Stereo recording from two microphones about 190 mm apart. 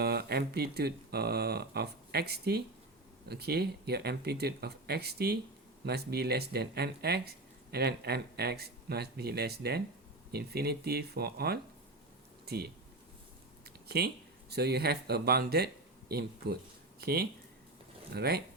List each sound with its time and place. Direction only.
0.0 s speech: 55° right (ahead or behind)
13.7 s a sound: 55° right (ahead or behind)
14.5 s speech: 60° right (ahead or behind)